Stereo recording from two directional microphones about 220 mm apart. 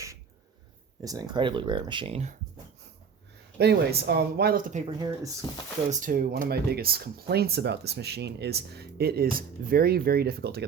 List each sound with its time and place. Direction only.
1.0 s speech: 15° right (ahead or behind)
3.6 s speech: 50° right (ahead or behind)
4.9 s speech: 15° right (ahead or behind)
5.9 s speech: 40° right (ahead or behind)